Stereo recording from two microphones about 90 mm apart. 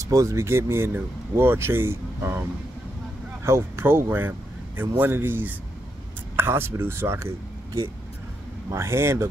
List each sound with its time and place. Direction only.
0.0 s speech: 35° right (ahead or behind)
3.4 s speech: 30° right (ahead or behind)
8.7 s speech: 30° right (ahead or behind)